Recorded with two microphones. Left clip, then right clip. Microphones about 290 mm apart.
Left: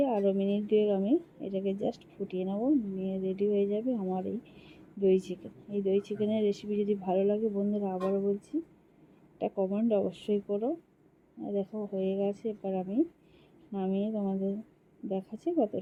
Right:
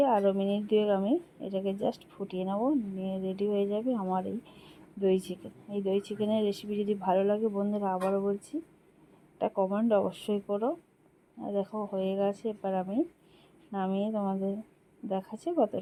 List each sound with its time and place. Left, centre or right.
0.0 s speech: right